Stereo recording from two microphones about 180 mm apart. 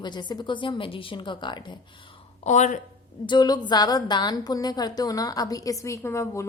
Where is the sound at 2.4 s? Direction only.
40° left (ahead or behind).